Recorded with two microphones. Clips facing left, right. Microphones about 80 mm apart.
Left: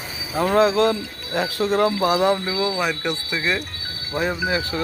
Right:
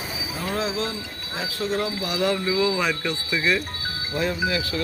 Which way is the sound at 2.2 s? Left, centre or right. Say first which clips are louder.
Left 3 dB; left.